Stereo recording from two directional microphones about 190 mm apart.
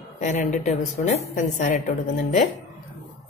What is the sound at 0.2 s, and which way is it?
Speech, 40° left (ahead or behind).